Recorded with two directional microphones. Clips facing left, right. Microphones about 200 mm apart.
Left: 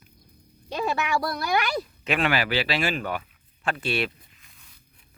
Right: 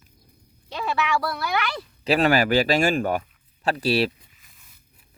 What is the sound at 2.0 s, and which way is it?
Speech, 40° right (ahead or behind).